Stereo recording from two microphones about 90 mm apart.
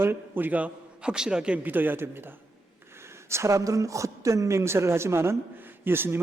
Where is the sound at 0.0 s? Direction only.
25° right (ahead or behind).